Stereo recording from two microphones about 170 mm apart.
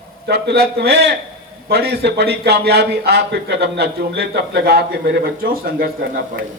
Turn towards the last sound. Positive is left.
turn(degrees=-60)  # may be behind; listen again after turning